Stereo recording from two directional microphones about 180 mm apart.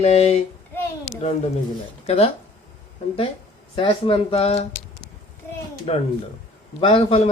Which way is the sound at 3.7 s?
30° left (ahead or behind).